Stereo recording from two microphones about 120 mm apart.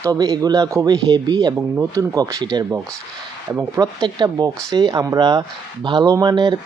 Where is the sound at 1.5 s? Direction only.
20° right (ahead or behind).